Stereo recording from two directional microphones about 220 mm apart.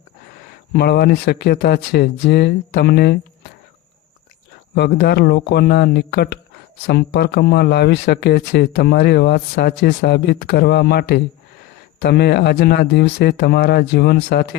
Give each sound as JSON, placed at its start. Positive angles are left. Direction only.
{"t": 0.7, "sound": "speech", "side_deg": 45}
{"t": 4.7, "sound": "speech", "side_deg": 45}